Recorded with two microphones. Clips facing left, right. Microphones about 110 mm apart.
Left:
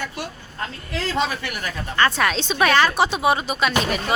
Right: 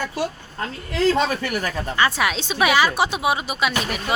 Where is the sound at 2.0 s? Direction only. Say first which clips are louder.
Left 2 dB; 10° right (ahead or behind).